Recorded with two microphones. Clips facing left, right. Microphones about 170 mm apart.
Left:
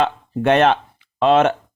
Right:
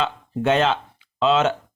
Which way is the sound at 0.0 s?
60° left (ahead or behind).